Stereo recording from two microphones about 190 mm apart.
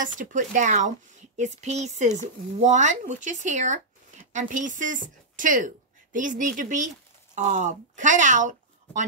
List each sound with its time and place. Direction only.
0.0 s a woman's voice: 45° right (ahead or behind)